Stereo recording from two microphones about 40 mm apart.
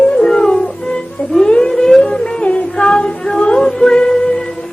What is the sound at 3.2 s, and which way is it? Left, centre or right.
Music, centre.